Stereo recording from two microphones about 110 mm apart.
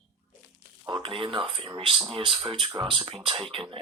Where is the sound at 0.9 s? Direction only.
50° right (ahead or behind).